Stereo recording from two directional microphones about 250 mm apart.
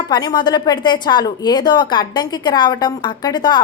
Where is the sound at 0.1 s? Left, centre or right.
Centre.